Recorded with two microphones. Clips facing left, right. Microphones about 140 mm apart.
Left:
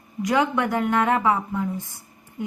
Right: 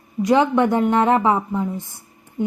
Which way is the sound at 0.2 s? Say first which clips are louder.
Right 6 dB; 25° right (ahead or behind).